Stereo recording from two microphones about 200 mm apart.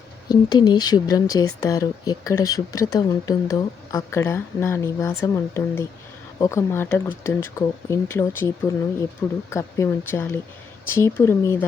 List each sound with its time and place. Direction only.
0.3 s speech: 20° left (ahead or behind)